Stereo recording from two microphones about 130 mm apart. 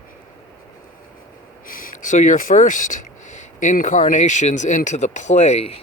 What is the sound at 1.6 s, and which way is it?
Speech, 90° left.